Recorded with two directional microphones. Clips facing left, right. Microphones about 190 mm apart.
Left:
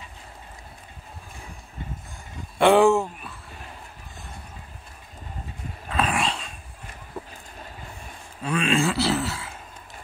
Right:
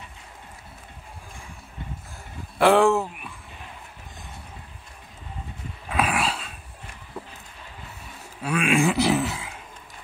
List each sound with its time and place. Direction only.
2.6 s speech: centre (ahead or behind)
5.9 s dog: 10° right (ahead or behind)
8.4 s a sound: 10° right (ahead or behind)